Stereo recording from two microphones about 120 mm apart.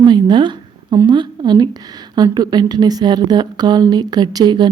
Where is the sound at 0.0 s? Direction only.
40° right (ahead or behind).